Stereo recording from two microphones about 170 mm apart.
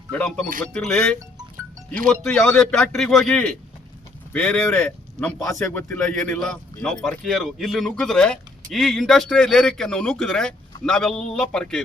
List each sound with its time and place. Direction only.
0.1 s speech: 5° left (ahead or behind)